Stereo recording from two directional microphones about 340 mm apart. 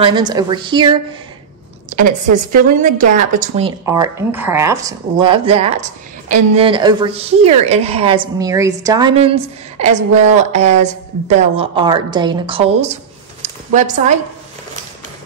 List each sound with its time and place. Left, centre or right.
0.0 s speech: centre
2.5 s speech: right